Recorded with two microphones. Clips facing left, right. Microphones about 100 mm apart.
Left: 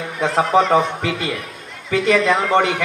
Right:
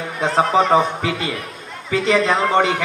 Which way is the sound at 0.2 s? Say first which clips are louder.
Even; 30° right (ahead or behind).